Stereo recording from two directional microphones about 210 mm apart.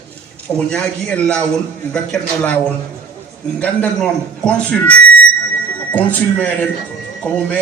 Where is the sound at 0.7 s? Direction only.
5° left (ahead or behind).